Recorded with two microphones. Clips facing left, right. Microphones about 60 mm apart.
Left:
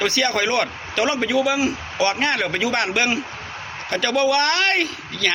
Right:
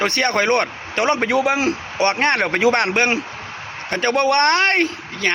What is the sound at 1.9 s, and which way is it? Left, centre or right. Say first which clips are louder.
A man's voice: right 3 dB; right.